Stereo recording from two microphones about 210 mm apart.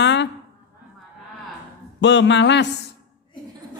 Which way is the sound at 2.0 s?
60° left (ahead or behind).